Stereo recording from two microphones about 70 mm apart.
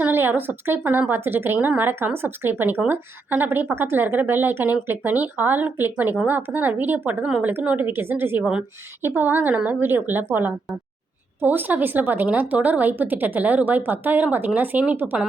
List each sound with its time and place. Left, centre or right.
0.0 s speech: right
11.3 s speech: right